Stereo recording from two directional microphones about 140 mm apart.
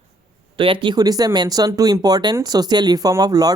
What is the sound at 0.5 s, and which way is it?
Speech, 40° right (ahead or behind).